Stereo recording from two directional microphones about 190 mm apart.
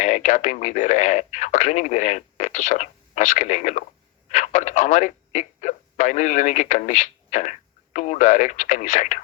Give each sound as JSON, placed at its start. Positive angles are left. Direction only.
{"t": 0.0, "sound": "speech", "side_deg": 40}